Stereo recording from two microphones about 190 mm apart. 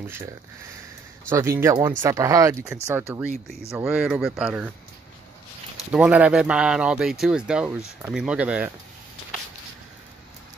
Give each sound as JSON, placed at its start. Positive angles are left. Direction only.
{"t": 0.0, "sound": "speech", "side_deg": -10}
{"t": 1.3, "sound": "speech", "side_deg": -15}
{"t": 5.9, "sound": "speech", "side_deg": -5}